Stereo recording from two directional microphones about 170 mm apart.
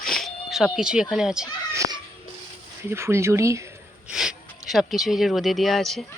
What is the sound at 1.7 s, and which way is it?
A child's voice, 20° right (ahead or behind).